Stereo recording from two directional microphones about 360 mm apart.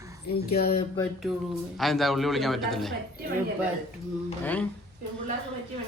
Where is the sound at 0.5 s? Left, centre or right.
Left.